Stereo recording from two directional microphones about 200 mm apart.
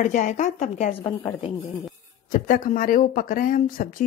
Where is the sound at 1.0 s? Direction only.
25° left (ahead or behind).